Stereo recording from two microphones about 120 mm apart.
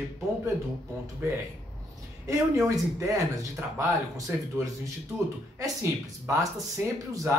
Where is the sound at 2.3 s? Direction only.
25° right (ahead or behind).